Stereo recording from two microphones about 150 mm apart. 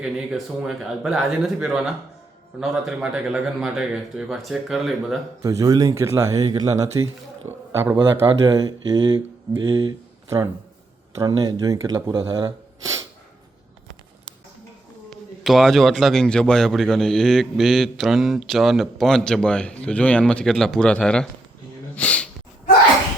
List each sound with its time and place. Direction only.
0.0 s a man's voice: 5° right (ahead or behind)
5.4 s speech: 20° right (ahead or behind)
10.2 s speech: 20° right (ahead or behind)
12.8 s a sound: 20° right (ahead or behind)
15.4 s a man's voice: centre (ahead or behind)
21.9 s a sound: 10° left (ahead or behind)